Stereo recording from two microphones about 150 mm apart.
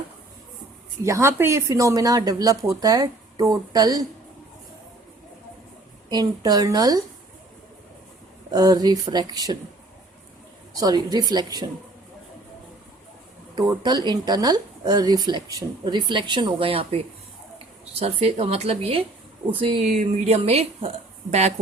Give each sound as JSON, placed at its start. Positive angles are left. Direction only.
{"t": 1.0, "sound": "speech", "side_deg": -20}
{"t": 6.1, "sound": "speech", "side_deg": -25}
{"t": 8.4, "sound": "speech", "side_deg": -25}
{"t": 10.8, "sound": "speech", "side_deg": -25}
{"t": 13.6, "sound": "speech", "side_deg": -30}
{"t": 18.0, "sound": "a woman's voice", "side_deg": -45}
{"t": 19.9, "sound": "a woman's voice", "side_deg": -55}